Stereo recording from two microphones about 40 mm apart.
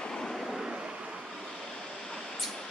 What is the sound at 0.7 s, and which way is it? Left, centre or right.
Vehicle, right.